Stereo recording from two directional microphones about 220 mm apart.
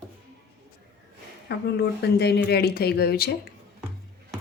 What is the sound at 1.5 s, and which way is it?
Speech, 50° left (ahead or behind).